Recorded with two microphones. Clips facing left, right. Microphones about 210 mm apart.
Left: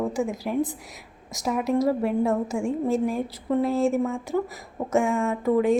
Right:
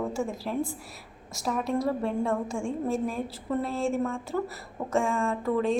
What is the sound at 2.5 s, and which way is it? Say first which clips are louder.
Speech: left 5 dB; 20° left (ahead or behind).